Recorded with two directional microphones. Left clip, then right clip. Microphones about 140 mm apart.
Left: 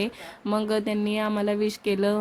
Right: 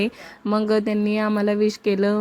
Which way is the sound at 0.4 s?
25° right (ahead or behind).